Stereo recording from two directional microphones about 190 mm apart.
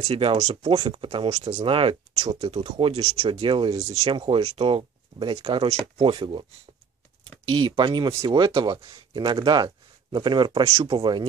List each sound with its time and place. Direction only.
0.0 s speech: 30° right (ahead or behind)
3.9 s speech: 35° right (ahead or behind)
7.5 s speech: 25° right (ahead or behind)